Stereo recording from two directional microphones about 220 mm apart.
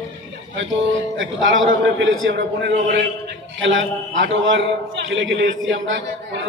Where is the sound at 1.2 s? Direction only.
60° right (ahead or behind).